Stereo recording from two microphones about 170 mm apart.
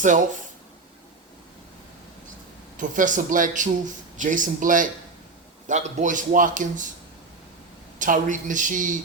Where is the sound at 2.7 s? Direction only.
50° right (ahead or behind).